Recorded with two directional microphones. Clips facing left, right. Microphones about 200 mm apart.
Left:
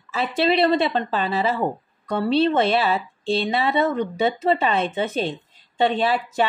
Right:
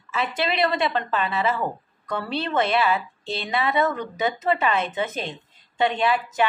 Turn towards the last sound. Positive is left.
turn(degrees=30)  # may be behind; listen again after turning